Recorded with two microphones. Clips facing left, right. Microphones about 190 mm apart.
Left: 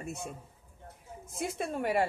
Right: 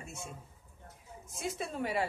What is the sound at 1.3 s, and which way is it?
Speech, 55° left (ahead or behind).